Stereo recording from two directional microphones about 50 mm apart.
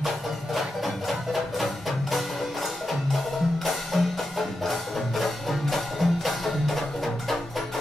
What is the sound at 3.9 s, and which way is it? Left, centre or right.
Music, centre.